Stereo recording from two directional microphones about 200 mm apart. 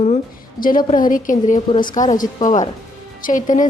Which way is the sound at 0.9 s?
45° left (ahead or behind).